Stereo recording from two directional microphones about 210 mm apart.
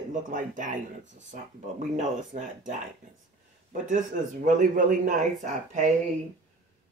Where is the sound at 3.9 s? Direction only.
35° right (ahead or behind).